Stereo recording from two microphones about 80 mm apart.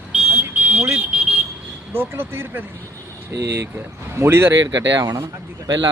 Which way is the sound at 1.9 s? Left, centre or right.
Right.